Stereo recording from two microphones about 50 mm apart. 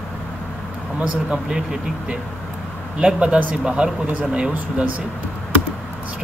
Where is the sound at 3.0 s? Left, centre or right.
Right.